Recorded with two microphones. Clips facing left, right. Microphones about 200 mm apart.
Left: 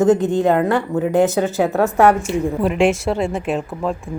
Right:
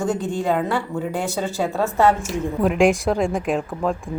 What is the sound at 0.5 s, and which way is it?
Speech, 60° left (ahead or behind).